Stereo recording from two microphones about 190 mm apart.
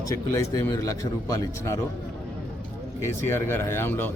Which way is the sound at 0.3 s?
15° left (ahead or behind).